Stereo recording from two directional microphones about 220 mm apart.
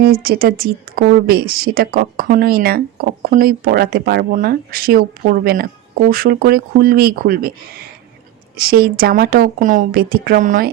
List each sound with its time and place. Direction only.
0.0 s a woman's voice: 45° right (ahead or behind)